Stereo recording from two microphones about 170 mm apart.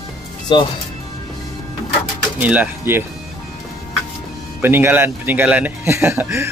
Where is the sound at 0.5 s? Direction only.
30° left (ahead or behind).